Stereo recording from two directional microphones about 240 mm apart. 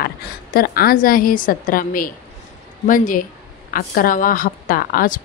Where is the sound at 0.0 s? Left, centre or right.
Left.